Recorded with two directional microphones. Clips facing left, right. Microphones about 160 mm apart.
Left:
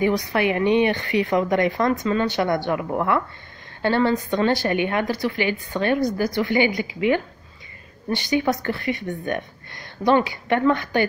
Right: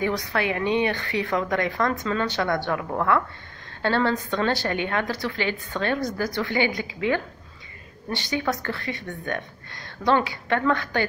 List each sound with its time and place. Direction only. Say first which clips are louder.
0.0 s a woman's voice: left 5 dB; 15° left (ahead or behind)